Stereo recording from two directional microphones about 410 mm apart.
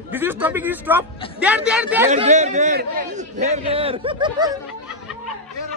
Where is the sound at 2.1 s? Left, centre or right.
Centre.